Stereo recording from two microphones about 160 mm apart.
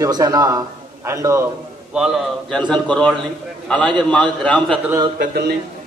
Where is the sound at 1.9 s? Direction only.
5° right (ahead or behind).